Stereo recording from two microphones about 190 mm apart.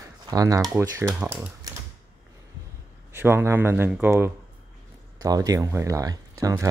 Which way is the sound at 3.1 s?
10° right (ahead or behind).